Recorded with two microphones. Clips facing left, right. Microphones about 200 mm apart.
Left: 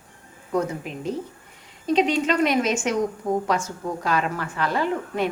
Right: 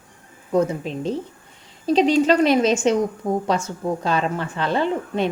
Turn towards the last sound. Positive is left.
turn(degrees=-25)  # may be behind; listen again after turning